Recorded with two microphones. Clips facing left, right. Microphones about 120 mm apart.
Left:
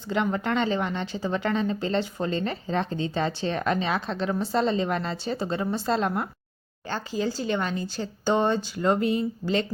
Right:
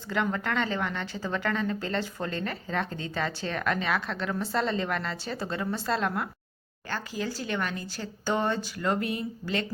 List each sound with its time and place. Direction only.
0.1 s speech: 20° left (ahead or behind)